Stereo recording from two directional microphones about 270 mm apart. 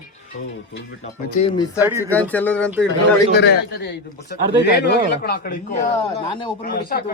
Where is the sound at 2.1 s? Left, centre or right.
Centre.